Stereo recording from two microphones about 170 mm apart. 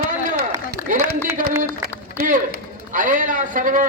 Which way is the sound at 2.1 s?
55° right (ahead or behind).